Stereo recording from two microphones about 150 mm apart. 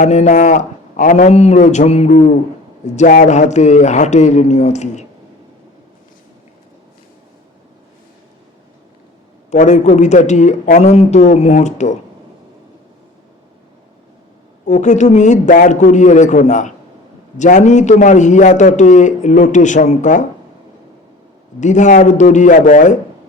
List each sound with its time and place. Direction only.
0.0 s a man's voice: 55° left (ahead or behind)
9.5 s a man's voice: 50° left (ahead or behind)
14.7 s a man's voice: 55° left (ahead or behind)
21.6 s a man's voice: 55° left (ahead or behind)